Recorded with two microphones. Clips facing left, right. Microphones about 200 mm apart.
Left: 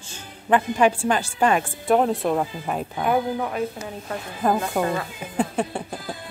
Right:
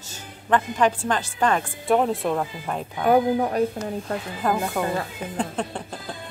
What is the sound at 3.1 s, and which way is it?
Speech, 40° right (ahead or behind).